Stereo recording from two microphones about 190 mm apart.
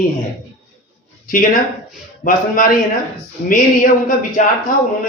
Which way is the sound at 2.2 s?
45° left (ahead or behind).